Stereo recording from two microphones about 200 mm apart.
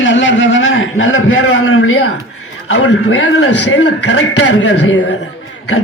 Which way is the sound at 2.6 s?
70° left (ahead or behind).